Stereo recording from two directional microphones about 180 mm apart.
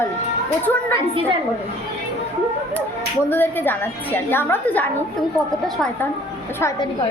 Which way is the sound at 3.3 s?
10° left (ahead or behind).